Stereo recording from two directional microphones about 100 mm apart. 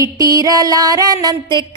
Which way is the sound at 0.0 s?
40° right (ahead or behind).